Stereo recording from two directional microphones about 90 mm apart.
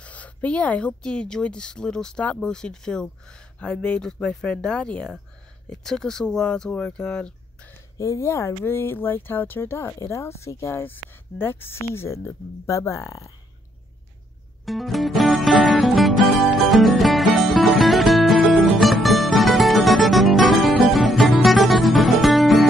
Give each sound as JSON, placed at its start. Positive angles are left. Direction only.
{"t": 0.0, "sound": "speech", "side_deg": 15}
{"t": 8.0, "sound": "speech", "side_deg": 35}
{"t": 14.6, "sound": "music", "side_deg": 0}